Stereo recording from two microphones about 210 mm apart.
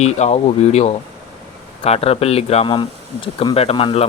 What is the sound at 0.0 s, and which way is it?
Speech, 30° left (ahead or behind).